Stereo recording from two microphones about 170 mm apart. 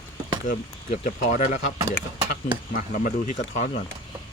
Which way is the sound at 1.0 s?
50° left (ahead or behind).